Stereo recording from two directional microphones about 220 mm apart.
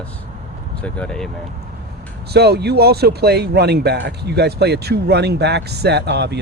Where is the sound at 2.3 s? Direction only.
50° right (ahead or behind).